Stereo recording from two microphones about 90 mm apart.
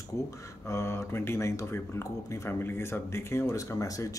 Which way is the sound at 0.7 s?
30° left (ahead or behind).